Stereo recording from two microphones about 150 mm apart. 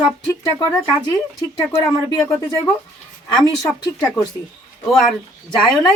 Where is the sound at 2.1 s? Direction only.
15° left (ahead or behind).